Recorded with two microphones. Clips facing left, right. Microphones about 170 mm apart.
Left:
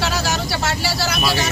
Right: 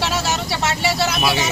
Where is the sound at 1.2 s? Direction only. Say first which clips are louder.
Left 1 dB; 20° right (ahead or behind).